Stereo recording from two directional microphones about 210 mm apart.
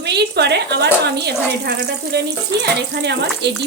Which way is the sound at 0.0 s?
55° right (ahead or behind).